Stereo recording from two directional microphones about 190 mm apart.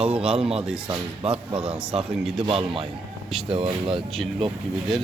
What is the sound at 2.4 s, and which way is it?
Speech, 30° right (ahead or behind).